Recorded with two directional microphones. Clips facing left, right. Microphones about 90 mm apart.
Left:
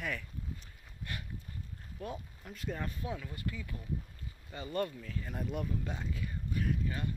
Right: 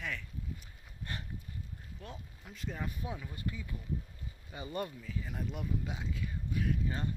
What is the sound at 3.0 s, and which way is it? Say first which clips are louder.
Speech: left 1 dB; 20° right (ahead or behind).